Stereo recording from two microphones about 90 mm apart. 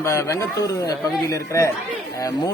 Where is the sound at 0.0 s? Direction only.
35° left (ahead or behind).